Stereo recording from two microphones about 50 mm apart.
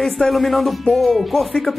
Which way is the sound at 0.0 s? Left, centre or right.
Centre.